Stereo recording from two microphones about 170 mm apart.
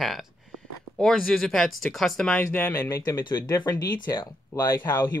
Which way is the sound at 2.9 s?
20° left (ahead or behind).